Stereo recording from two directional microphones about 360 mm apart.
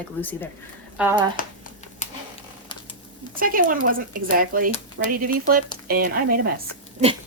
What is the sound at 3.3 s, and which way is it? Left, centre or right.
Speech, right.